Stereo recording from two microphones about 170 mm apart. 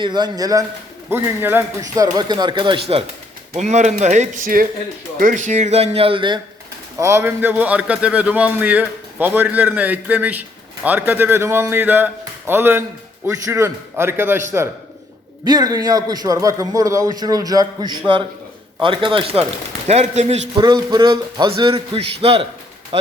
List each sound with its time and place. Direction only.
0.0 s a man's voice: 25° right (ahead or behind)
7.0 s a man's voice: 15° right (ahead or behind); by 20.4 s 40° right (ahead or behind)
20.6 s a man's voice: 25° right (ahead or behind)